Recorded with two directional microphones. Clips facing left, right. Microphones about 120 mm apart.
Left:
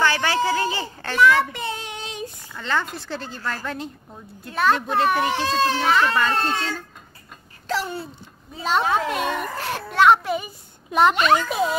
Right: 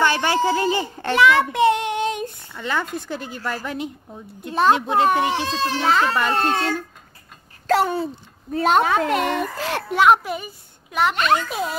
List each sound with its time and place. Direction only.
0.0 s a child's voice: 20° right (ahead or behind)
1.5 s child singing: 70° right (ahead or behind); by 2.2 s 55° right (ahead or behind)
2.6 s a woman's voice: 10° right (ahead or behind)
6.3 s a woman's voice: 55° right (ahead or behind)
9.3 s a child's voice: 90° right
9.9 s speech: 5° right (ahead or behind)
10.9 s a child's voice: 25° left (ahead or behind)
11.1 s speech: centre (ahead or behind)